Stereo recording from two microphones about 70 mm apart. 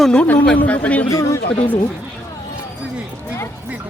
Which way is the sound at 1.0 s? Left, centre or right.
Left.